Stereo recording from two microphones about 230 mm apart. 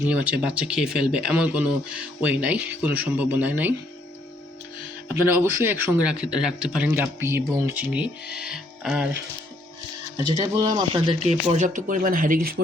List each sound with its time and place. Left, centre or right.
0.1 s a man's voice: centre
5.3 s a man's voice: centre
10.4 s speech: centre; by 12.6 s right